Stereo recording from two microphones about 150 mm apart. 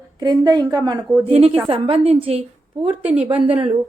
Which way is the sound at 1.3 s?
40° right (ahead or behind).